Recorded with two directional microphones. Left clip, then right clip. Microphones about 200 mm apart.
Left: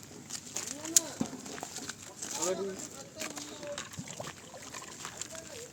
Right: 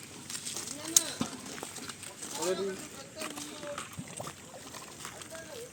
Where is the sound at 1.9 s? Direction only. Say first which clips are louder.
Left 1 dB; centre (ahead or behind).